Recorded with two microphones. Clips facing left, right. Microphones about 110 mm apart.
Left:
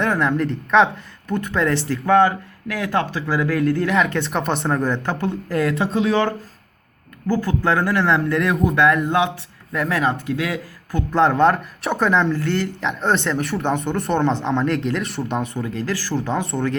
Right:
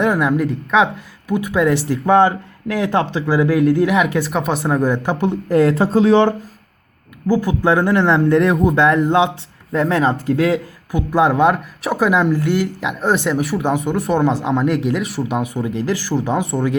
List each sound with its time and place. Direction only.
0.0 s speech: 10° right (ahead or behind)
1.9 s speech: 20° right (ahead or behind)
7.3 s speech: 15° right (ahead or behind); by 10.6 s 35° right (ahead or behind)
10.9 s speech: 10° right (ahead or behind)